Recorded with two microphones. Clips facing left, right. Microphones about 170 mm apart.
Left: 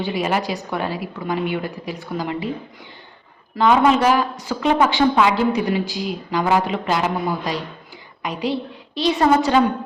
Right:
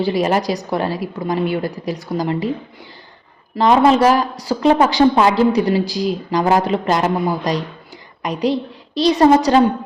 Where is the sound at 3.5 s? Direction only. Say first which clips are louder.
Right 3 dB; 35° right (ahead or behind).